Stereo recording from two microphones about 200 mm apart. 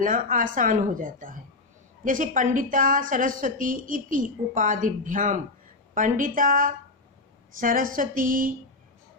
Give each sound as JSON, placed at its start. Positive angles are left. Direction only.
{"t": 0.0, "sound": "a woman's voice", "side_deg": -40}